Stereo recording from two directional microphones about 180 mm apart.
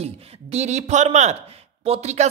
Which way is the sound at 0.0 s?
35° right (ahead or behind).